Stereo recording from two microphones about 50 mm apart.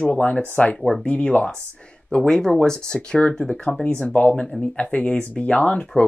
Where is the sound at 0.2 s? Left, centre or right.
Left.